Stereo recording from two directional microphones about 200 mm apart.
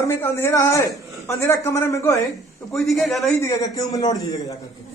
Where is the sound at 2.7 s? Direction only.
Centre (ahead or behind).